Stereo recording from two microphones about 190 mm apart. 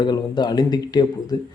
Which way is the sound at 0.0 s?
20° left (ahead or behind).